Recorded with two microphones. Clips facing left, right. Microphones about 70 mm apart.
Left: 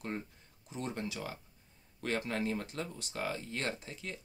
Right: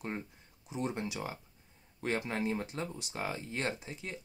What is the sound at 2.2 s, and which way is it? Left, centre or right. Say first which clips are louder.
Speech: right 1 dB; right.